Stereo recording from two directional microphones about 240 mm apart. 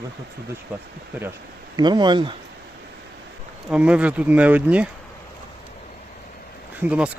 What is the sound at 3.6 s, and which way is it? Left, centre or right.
Speech, centre.